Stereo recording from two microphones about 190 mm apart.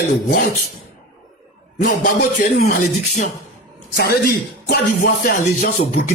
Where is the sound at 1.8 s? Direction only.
45° left (ahead or behind).